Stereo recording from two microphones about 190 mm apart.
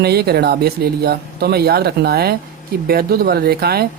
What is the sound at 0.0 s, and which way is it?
Speech, 55° right (ahead or behind).